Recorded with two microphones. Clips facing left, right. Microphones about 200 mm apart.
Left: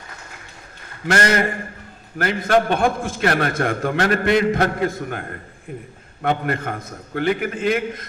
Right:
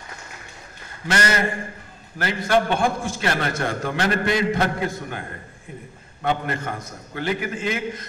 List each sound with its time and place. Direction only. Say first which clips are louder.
1.1 s a man's voice: left 3 dB; 55° left (ahead or behind)